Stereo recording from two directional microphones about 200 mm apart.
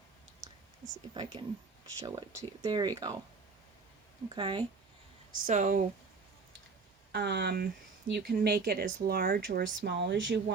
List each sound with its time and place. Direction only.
0.4 s whispering: 15° right (ahead or behind)
1.1 s speech: 20° right (ahead or behind)
4.4 s speech: 25° right (ahead or behind)
5.3 s speech: 40° right (ahead or behind)
7.1 s speech: 55° right (ahead or behind)